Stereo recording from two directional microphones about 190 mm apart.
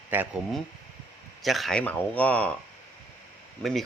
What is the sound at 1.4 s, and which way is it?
Speech, centre (ahead or behind).